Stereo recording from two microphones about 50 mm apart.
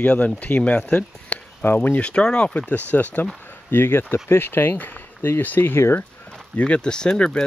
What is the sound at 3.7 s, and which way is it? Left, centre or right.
Speech, left.